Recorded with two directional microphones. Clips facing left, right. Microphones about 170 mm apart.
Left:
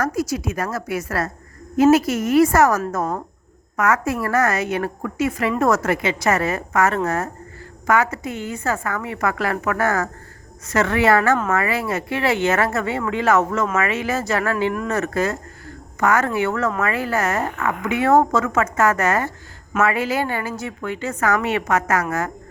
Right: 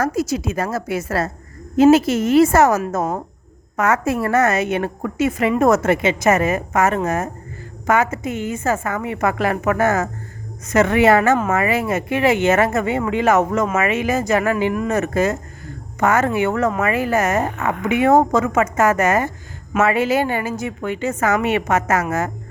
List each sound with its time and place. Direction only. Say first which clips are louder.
0.0 s a woman's voice: right 2 dB; 25° right (ahead or behind)